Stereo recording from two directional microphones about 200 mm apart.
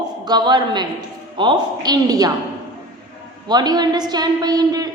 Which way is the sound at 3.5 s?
20° right (ahead or behind).